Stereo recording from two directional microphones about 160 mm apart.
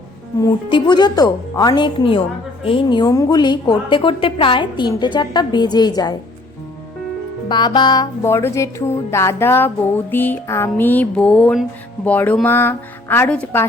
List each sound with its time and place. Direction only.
0.4 s a woman's voice: 25° left (ahead or behind)
7.4 s a woman's voice: 30° left (ahead or behind)
8.2 s speech: 15° left (ahead or behind)